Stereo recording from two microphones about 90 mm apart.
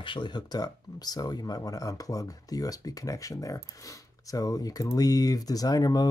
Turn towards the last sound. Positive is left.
turn(degrees=45)  # may be behind; listen again after turning